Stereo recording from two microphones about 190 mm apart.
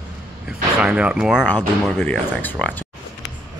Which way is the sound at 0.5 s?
5° right (ahead or behind).